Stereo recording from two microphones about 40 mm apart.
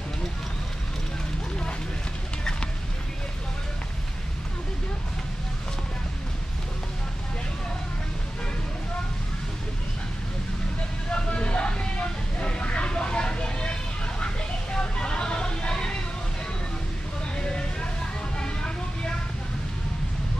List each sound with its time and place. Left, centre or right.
11.1 s vehicle: left
14.2 s music: left
17.4 s vehicle: left